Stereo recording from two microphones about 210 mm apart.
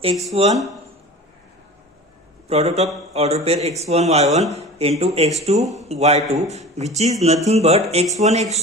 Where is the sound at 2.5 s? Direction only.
30° right (ahead or behind).